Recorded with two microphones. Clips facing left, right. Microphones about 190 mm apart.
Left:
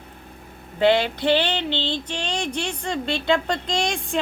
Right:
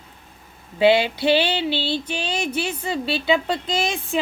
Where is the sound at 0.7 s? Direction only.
10° right (ahead or behind).